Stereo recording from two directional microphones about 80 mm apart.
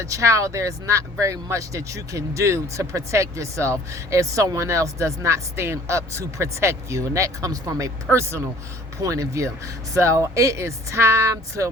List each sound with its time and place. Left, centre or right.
0.0 s speech: right
8.1 s speech: right
9.0 s speech: right